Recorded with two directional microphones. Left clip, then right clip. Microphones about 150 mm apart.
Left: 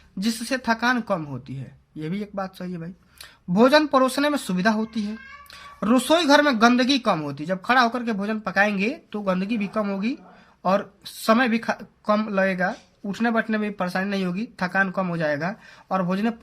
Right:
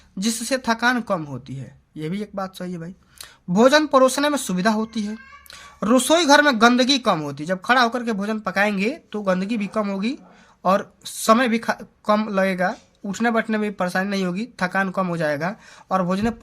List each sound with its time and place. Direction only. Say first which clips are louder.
0.2 s speech: right 3 dB; 25° right (ahead or behind)